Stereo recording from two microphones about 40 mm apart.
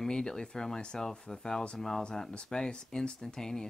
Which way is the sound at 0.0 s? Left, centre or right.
Centre.